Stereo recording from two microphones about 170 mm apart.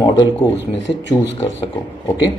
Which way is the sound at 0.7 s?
90° left.